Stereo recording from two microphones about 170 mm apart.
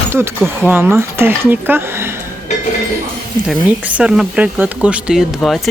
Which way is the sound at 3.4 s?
10° right (ahead or behind).